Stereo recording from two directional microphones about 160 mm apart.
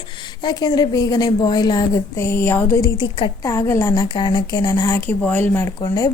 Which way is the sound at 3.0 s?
30° left (ahead or behind).